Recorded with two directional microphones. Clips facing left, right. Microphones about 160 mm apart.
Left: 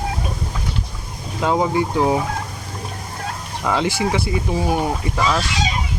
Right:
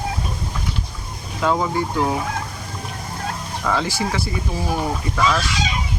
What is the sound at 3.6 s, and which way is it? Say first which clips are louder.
Speech: left 3 dB; 20° left (ahead or behind).